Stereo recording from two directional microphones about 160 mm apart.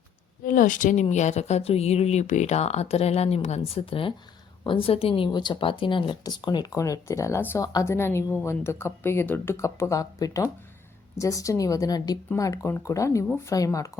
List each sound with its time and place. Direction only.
0.4 s speech: 55° left (ahead or behind); by 13.9 s 20° left (ahead or behind)